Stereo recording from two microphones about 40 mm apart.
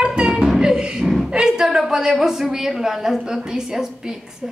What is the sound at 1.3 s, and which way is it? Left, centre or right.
A woman's voice, centre.